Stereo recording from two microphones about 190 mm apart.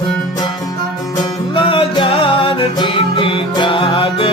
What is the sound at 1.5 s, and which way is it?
Music, 25° left (ahead or behind).